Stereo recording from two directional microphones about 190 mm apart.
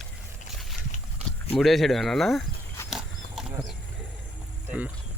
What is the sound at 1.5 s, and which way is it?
Speech, centre (ahead or behind).